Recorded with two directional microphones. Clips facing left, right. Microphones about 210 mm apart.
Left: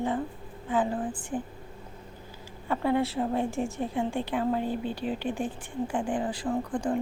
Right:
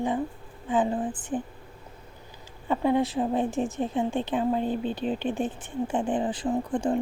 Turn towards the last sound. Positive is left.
turn(degrees=-25)  # may be behind; listen again after turning